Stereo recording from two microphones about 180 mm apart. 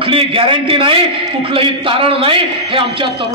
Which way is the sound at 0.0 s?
30° right (ahead or behind).